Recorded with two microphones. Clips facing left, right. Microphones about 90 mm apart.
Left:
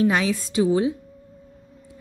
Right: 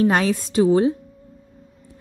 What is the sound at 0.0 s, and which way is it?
Speech, 45° right (ahead or behind).